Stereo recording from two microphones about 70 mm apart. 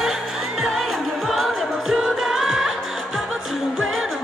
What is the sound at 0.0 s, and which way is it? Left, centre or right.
Music, centre.